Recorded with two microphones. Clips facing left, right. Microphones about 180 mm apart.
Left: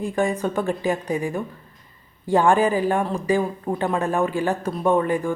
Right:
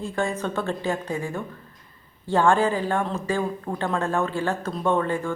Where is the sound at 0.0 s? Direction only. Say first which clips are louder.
Left 4 dB; 15° left (ahead or behind).